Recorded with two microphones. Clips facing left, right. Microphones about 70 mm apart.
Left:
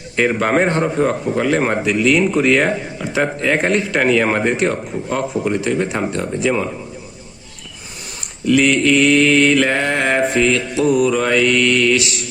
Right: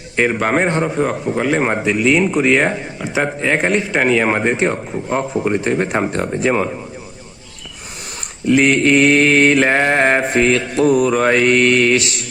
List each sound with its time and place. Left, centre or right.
0.2 s a man's voice: centre
4.5 s mantra: right
8.4 s mantra: right